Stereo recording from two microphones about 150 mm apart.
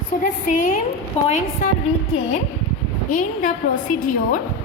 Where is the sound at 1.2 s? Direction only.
40° left (ahead or behind).